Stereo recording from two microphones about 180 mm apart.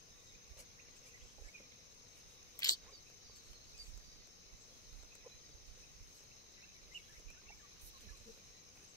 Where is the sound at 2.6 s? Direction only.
20° left (ahead or behind).